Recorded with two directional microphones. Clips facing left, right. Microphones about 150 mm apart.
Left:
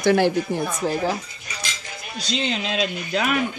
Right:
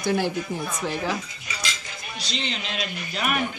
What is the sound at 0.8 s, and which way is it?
Speech, 35° left (ahead or behind).